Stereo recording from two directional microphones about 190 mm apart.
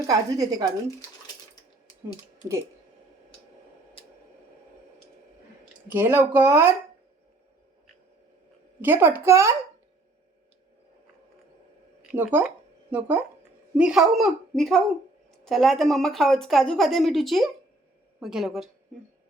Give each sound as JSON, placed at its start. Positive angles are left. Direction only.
{"t": 0.1, "sound": "a woman's voice", "side_deg": -20}
{"t": 4.0, "sound": "tick", "side_deg": 30}
{"t": 5.9, "sound": "speech", "side_deg": -10}
{"t": 8.8, "sound": "speech", "side_deg": -10}
{"t": 12.0, "sound": "speech", "side_deg": -10}